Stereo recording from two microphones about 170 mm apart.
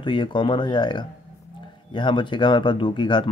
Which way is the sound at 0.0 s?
30° left (ahead or behind).